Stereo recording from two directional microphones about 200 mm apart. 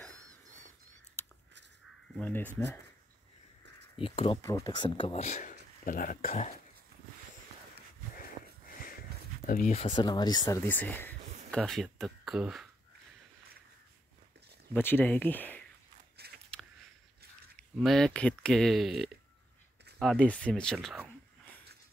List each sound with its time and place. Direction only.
2.1 s speech: 10° left (ahead or behind)
4.0 s speech: 25° left (ahead or behind)
4.4 s speech: 15° left (ahead or behind); by 6.5 s 40° left (ahead or behind)
9.5 s speech: 45° left (ahead or behind)
9.9 s speech: 20° left (ahead or behind); by 12.6 s centre (ahead or behind)
14.7 s speech: 10° left (ahead or behind)
16.2 s biting: 55° right (ahead or behind)
17.6 s speech: centre (ahead or behind)